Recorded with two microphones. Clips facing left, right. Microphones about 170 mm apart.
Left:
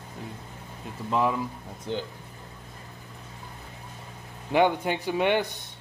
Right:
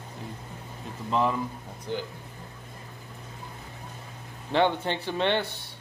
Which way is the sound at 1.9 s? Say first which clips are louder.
Left 1 dB; 20° left (ahead or behind).